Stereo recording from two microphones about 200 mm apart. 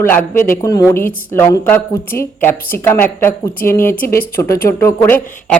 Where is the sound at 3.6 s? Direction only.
45° left (ahead or behind).